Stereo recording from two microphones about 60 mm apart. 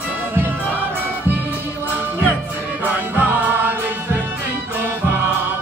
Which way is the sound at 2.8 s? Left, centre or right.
Right.